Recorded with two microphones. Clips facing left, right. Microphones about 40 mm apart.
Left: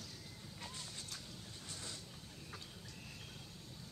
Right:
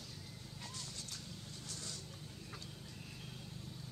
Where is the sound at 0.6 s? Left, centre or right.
Centre.